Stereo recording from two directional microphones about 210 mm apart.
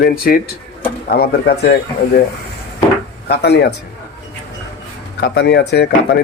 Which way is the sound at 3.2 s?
50° left (ahead or behind).